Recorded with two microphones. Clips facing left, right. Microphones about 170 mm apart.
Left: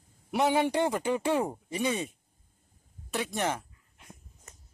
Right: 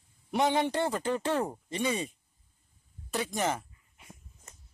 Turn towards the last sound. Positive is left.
turn(degrees=0)  # may be behind; listen again after turning